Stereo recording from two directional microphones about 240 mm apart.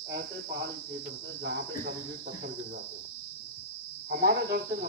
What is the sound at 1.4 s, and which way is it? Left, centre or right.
Speech, right.